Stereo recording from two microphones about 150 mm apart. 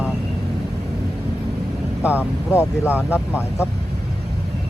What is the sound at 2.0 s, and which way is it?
Speech, 10° right (ahead or behind).